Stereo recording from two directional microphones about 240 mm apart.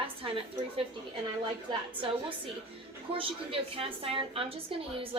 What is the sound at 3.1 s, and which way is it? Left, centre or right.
A woman's voice, right.